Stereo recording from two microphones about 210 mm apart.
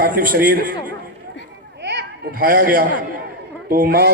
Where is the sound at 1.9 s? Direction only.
50° right (ahead or behind).